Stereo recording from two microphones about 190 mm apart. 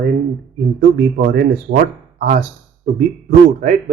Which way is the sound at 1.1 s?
60° right (ahead or behind).